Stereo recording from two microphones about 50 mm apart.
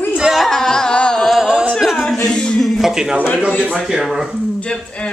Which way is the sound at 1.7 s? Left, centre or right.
Centre.